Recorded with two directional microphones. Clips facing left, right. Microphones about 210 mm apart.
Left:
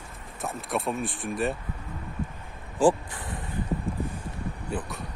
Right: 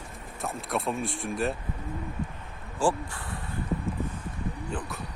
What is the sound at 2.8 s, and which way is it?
Speech, 20° left (ahead or behind).